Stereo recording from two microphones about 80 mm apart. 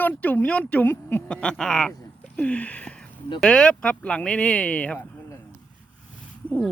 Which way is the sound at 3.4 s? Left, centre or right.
Centre.